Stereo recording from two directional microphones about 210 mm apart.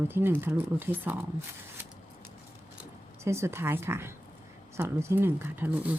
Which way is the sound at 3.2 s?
10° right (ahead or behind).